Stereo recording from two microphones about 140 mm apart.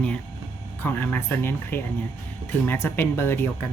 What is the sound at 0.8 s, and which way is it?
Speech, 15° left (ahead or behind).